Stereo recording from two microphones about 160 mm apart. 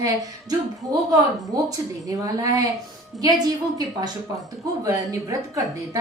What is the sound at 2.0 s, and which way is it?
Speech, 20° right (ahead or behind).